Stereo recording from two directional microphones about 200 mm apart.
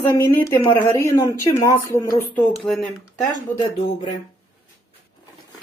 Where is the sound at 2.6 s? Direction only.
Centre (ahead or behind).